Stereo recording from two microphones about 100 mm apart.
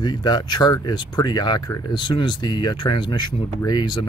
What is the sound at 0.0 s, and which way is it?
Speech, 45° left (ahead or behind).